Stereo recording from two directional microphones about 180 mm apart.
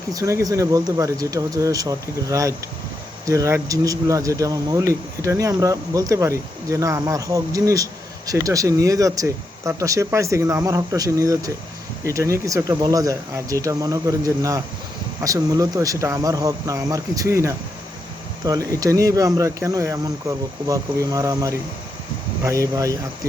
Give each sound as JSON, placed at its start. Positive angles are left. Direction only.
{"t": 0.1, "sound": "speech", "side_deg": -20}